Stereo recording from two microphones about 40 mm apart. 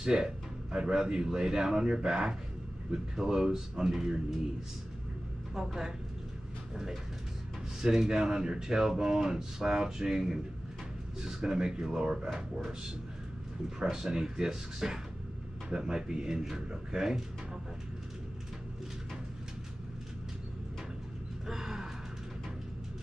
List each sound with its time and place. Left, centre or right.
0.0 s speech: centre
5.5 s speech: centre
7.8 s speech: centre
13.7 s speech: centre
21.5 s gasp: centre